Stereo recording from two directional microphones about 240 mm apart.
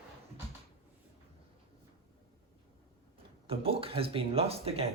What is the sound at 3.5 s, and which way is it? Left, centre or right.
Speech, right.